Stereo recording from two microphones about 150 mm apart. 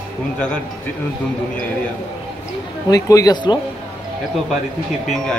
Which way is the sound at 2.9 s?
25° left (ahead or behind).